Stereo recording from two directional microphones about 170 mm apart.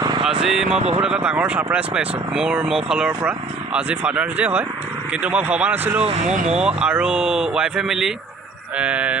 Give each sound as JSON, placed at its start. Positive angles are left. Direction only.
{"t": 0.0, "sound": "vehicle", "side_deg": -25}
{"t": 0.4, "sound": "speech", "side_deg": -5}